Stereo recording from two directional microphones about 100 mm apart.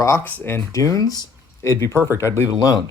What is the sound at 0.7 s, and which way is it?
Speech, 35° left (ahead or behind).